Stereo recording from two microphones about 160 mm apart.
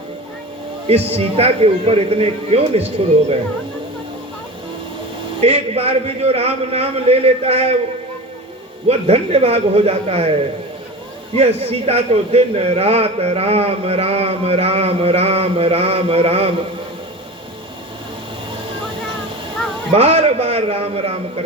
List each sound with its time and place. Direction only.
0.9 s a man's voice: 40° right (ahead or behind)
5.4 s a man's voice: 40° right (ahead or behind)
8.9 s a man's voice: 40° right (ahead or behind)
11.3 s a man's voice: 40° right (ahead or behind)
19.9 s a man's voice: 40° right (ahead or behind)